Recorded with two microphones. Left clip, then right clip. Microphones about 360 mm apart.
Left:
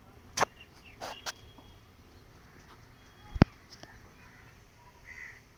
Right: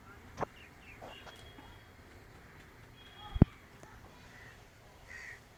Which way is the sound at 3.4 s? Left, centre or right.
Left.